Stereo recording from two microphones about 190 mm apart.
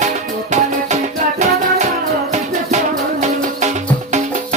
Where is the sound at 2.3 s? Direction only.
40° right (ahead or behind).